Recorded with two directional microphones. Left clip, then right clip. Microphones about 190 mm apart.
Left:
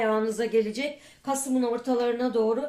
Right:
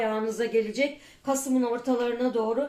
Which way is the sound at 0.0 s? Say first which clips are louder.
Left 2 dB; 40° left (ahead or behind).